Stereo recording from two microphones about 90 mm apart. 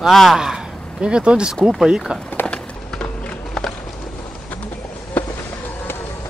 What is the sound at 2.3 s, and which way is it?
Bird, 20° left (ahead or behind).